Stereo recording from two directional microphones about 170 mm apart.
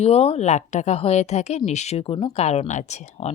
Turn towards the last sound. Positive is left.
turn(degrees=40)  # may be behind; listen again after turning